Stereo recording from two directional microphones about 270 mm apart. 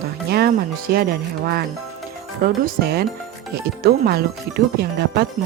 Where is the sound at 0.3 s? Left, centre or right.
Right.